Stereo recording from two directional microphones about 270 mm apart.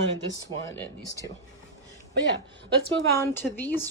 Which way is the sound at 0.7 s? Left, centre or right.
Centre.